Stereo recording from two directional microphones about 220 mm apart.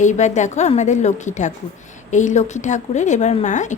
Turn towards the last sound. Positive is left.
turn(degrees=35)  # may be behind; listen again after turning